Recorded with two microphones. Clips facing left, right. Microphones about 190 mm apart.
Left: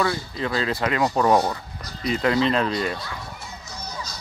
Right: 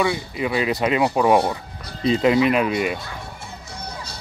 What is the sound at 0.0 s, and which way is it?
Speech, 15° right (ahead or behind).